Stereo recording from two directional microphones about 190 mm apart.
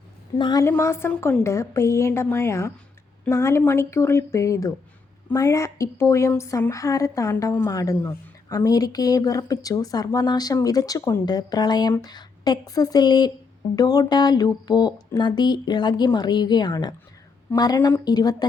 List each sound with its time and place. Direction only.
0.3 s a woman's voice: 20° left (ahead or behind)